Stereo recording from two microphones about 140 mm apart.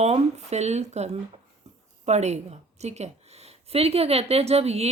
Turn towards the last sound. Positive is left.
turn(degrees=-45)  # may be behind; listen again after turning